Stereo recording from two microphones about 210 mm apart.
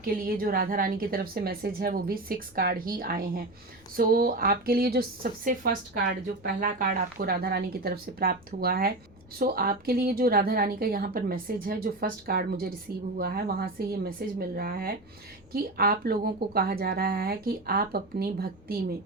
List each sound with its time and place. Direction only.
0.0 s speech: 45° right (ahead or behind)